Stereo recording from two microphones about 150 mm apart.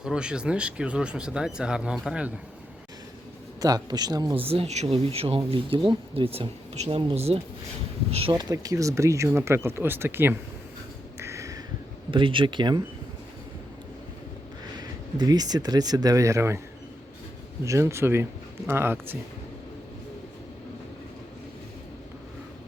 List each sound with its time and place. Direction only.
0.0 s speech: 5° right (ahead or behind)
3.6 s speech: 25° right (ahead or behind)
4.4 s speech: 40° right (ahead or behind)
8.3 s speech: 25° right (ahead or behind)
11.2 s a sound: 20° right (ahead or behind)
12.1 s speech: 35° right (ahead or behind)
14.8 s speech: 25° right (ahead or behind)
17.7 s speech: 20° right (ahead or behind)